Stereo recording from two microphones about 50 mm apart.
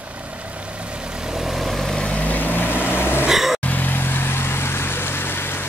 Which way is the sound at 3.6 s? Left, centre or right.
Left.